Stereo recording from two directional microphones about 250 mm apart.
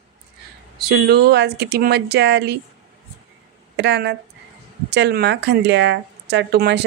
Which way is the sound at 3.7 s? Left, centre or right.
Right.